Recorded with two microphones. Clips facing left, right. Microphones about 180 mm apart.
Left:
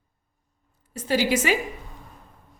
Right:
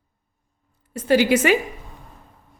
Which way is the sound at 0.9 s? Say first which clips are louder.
Right 6 dB; 60° right (ahead or behind).